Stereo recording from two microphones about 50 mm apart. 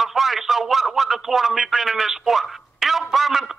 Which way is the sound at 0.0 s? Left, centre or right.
Centre.